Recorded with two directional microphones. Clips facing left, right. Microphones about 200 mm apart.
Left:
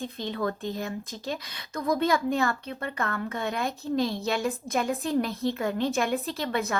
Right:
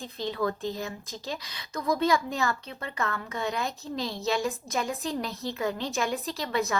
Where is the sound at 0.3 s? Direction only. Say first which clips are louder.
Even; 50° left (ahead or behind).